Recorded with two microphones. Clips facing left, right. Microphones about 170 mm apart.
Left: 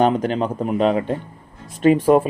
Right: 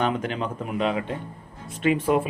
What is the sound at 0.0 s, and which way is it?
Speech, 35° left (ahead or behind).